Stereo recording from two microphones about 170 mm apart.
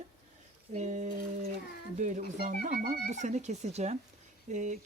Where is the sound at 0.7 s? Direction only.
45° right (ahead or behind).